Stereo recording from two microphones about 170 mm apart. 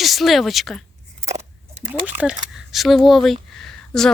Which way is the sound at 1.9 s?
5° right (ahead or behind).